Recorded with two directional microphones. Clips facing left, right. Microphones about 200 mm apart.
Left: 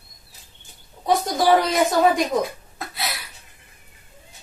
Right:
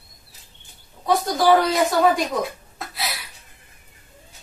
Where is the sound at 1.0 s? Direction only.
20° left (ahead or behind).